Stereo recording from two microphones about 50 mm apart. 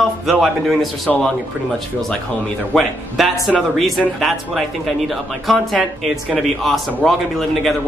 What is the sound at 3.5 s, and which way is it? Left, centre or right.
Speech, centre.